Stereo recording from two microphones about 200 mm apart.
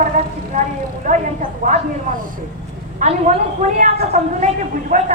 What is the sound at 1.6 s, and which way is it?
Speech, 40° right (ahead or behind).